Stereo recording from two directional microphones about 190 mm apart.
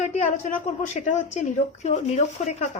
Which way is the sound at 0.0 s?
40° left (ahead or behind).